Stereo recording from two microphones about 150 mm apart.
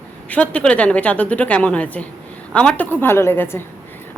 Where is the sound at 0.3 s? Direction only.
10° left (ahead or behind).